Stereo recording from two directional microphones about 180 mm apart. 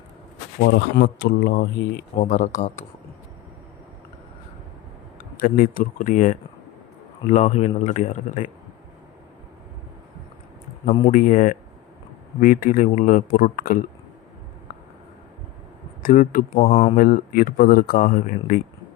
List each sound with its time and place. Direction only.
0.6 s speech: 70° left (ahead or behind)
2.1 s speech: 45° left (ahead or behind)
5.1 s a man's voice: 50° left (ahead or behind)
11.1 s speech: 50° left (ahead or behind)
16.0 s speech: 50° left (ahead or behind)
16.6 s a man's voice: 35° left (ahead or behind)
17.0 s speech: 55° left (ahead or behind)